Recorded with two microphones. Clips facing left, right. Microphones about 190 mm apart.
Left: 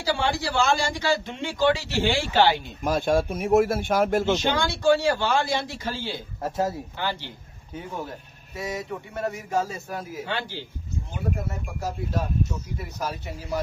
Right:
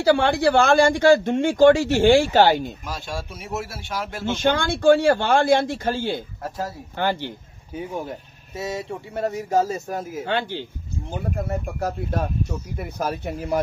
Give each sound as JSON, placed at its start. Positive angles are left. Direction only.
{"t": 0.0, "sound": "a man's voice", "side_deg": -55}
{"t": 2.8, "sound": "speech", "side_deg": 55}
{"t": 4.3, "sound": "a man's voice", "side_deg": -55}
{"t": 6.4, "sound": "speech", "side_deg": 25}
{"t": 7.0, "sound": "a man's voice", "side_deg": -50}
{"t": 8.5, "sound": "a man's voice", "side_deg": -25}